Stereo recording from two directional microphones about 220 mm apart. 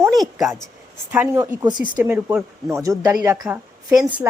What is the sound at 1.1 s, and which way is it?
A woman's voice, 10° right (ahead or behind).